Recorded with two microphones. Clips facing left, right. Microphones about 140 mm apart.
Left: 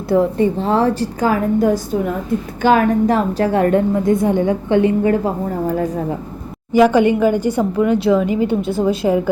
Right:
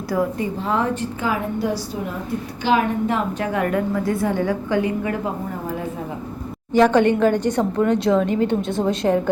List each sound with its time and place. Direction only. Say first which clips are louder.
0.1 s a woman's voice: left 8 dB; 30° left (ahead or behind)
6.7 s a woman's voice: left 3 dB; 10° left (ahead or behind)